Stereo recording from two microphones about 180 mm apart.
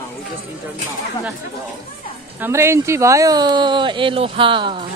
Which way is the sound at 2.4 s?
15° right (ahead or behind).